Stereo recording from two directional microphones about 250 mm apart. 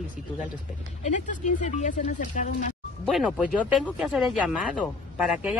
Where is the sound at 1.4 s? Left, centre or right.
Left.